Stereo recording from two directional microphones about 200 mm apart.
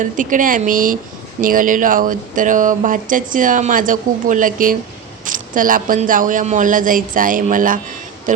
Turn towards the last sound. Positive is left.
turn(degrees=-40)  # may be behind; listen again after turning